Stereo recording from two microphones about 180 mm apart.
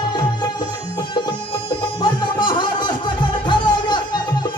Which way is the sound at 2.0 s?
25° left (ahead or behind).